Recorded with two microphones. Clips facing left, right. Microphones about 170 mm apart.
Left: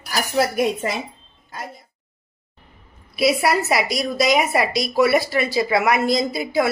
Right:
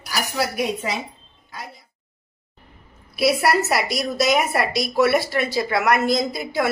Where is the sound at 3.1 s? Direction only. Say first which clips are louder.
Even; centre (ahead or behind).